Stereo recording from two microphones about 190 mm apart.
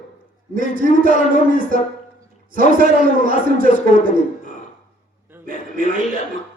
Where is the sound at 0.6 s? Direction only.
45° right (ahead or behind).